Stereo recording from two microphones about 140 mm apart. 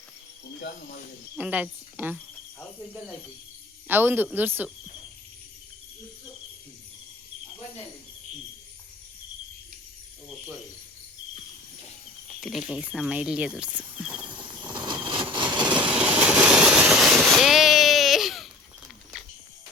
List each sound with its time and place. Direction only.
1.4 s speech: 10° right (ahead or behind)
3.8 s speech: 15° right (ahead or behind)
12.4 s speech: centre (ahead or behind)
14.6 s vehicle: 35° right (ahead or behind)
15.9 s vehicle: 10° right (ahead or behind)